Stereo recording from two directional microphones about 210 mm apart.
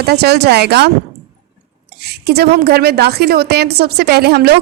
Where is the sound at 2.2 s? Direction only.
50° right (ahead or behind).